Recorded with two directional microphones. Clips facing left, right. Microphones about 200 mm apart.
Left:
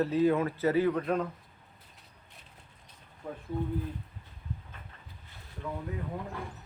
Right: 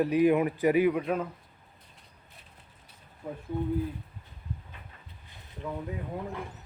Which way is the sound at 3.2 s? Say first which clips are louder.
Right 2 dB; 10° right (ahead or behind).